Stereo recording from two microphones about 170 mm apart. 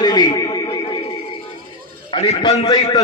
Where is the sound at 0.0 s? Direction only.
25° left (ahead or behind).